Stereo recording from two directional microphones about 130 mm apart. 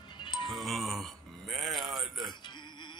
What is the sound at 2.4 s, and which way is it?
Music, 35° left (ahead or behind).